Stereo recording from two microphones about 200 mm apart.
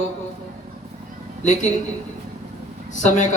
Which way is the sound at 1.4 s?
35° left (ahead or behind).